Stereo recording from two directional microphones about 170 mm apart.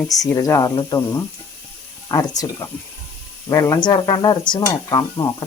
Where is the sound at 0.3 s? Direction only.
20° left (ahead or behind).